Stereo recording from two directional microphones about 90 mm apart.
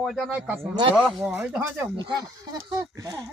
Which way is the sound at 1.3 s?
25° right (ahead or behind).